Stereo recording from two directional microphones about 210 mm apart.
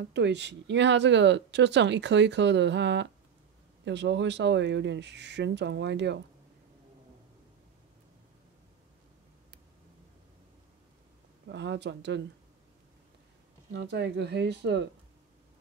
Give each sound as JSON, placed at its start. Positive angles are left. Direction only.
{"t": 0.1, "sound": "speech", "side_deg": -55}
{"t": 11.4, "sound": "speech", "side_deg": -55}
{"t": 13.7, "sound": "speech", "side_deg": -55}